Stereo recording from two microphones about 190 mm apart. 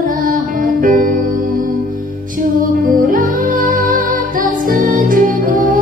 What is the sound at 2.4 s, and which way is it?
Music, 45° right (ahead or behind).